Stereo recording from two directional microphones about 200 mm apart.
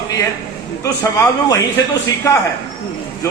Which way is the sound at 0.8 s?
15° left (ahead or behind).